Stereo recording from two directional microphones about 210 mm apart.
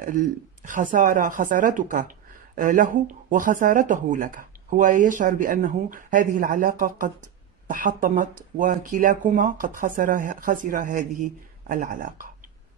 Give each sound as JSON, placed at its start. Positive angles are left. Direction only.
{"t": 0.0, "sound": "a woman's voice", "side_deg": -40}